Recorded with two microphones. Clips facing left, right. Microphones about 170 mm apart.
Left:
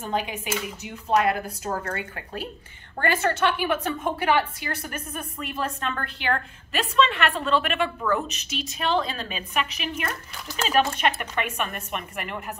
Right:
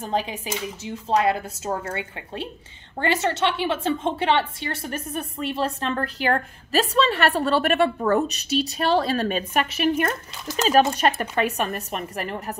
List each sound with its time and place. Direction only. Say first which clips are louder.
0.0 s a woman's voice: right 2 dB; 30° right (ahead or behind)
9.1 s a woman's voice: right 7 dB; 50° right (ahead or behind); by 12.5 s 35° right (ahead or behind)